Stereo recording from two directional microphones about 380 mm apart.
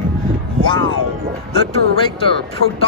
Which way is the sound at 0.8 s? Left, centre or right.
Right.